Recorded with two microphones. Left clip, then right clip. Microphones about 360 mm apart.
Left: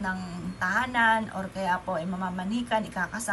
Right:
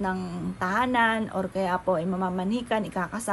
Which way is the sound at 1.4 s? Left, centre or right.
Centre.